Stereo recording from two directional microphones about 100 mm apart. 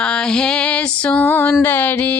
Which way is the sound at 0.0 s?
10° left (ahead or behind).